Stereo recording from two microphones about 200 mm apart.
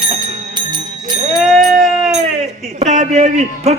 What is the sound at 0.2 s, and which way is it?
Music, 20° right (ahead or behind).